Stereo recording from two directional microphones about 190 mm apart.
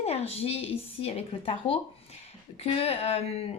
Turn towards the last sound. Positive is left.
turn(degrees=30)  # may be behind; listen again after turning